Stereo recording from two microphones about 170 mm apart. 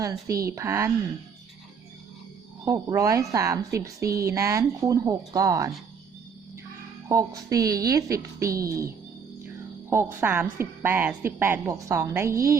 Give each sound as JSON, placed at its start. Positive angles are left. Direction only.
{"t": 0.0, "sound": "a woman's voice", "side_deg": -20}
{"t": 2.6, "sound": "a woman's voice", "side_deg": -20}
{"t": 7.1, "sound": "a woman's voice", "side_deg": -20}
{"t": 9.9, "sound": "a woman's voice", "side_deg": -10}